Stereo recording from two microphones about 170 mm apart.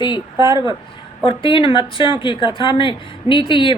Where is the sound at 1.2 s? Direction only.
30° left (ahead or behind).